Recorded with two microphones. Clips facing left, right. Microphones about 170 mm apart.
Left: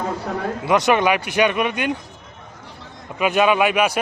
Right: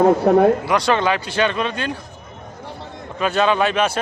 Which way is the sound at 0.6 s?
20° left (ahead or behind).